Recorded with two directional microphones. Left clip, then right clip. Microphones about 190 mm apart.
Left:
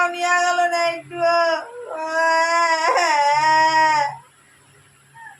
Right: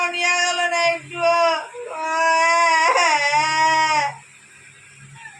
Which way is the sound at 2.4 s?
25° left (ahead or behind).